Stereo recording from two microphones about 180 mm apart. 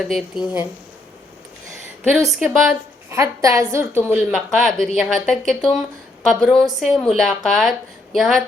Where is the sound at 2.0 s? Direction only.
Centre (ahead or behind).